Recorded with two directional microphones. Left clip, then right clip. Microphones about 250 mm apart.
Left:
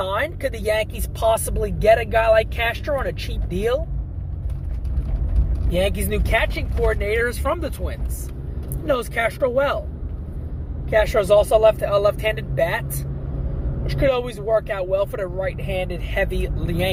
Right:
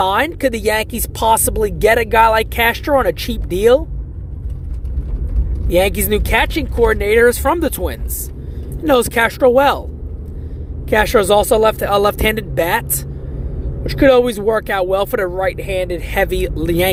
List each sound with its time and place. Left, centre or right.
0.0 s speech: right
5.7 s speech: right
10.8 s speech: right
14.0 s speech: right